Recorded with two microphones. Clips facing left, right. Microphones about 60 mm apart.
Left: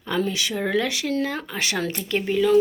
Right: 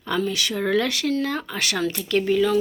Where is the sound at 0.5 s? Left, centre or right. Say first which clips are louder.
Right 3 dB; centre.